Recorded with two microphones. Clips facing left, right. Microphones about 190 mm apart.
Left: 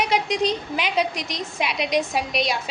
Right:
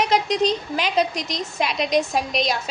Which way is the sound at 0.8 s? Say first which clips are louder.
Right 2 dB; 40° right (ahead or behind).